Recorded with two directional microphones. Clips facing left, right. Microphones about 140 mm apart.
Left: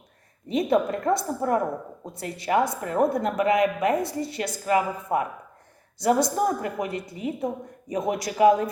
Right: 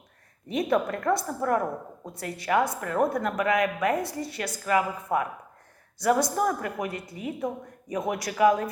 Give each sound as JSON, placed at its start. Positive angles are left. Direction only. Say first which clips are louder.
{"t": 0.4, "sound": "speech", "louder": "left 3 dB", "side_deg": 25}